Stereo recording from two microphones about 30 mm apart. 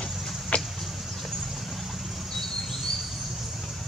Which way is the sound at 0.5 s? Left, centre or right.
Left.